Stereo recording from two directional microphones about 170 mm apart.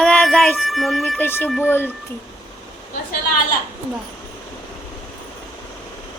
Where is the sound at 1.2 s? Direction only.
10° left (ahead or behind).